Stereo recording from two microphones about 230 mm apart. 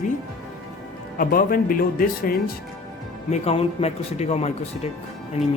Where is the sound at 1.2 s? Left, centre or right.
Left.